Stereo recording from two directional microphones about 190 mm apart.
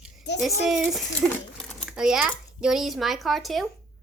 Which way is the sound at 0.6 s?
Centre (ahead or behind).